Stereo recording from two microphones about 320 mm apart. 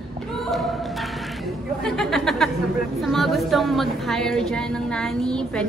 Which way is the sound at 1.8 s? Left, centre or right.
Centre.